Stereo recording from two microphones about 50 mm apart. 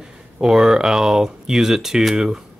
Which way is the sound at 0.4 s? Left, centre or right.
Centre.